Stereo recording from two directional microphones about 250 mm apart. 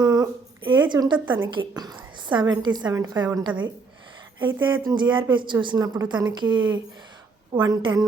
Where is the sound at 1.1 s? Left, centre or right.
Centre.